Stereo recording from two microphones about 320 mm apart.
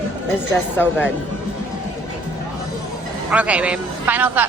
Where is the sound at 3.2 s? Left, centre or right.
Centre.